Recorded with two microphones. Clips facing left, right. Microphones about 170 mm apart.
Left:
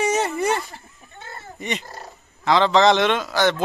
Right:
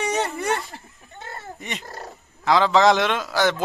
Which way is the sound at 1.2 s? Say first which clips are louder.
Right 2 dB; 40° right (ahead or behind).